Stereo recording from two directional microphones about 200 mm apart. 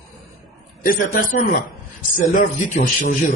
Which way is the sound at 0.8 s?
45° left (ahead or behind).